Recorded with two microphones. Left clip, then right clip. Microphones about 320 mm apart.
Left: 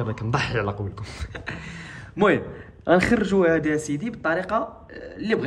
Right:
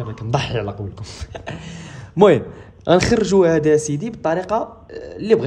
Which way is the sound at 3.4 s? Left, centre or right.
Centre.